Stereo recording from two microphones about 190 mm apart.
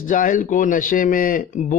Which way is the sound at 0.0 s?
45° left (ahead or behind).